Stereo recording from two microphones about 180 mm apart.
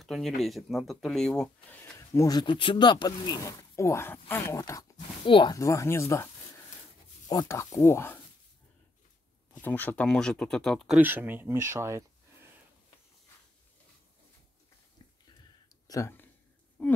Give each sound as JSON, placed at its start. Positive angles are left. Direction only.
{"t": 0.0, "sound": "speech", "side_deg": 0}
{"t": 9.5, "sound": "speech", "side_deg": 10}
{"t": 11.0, "sound": "speech", "side_deg": -10}
{"t": 15.9, "sound": "speech", "side_deg": 15}